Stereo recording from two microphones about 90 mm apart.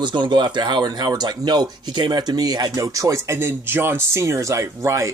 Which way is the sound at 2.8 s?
40° right (ahead or behind).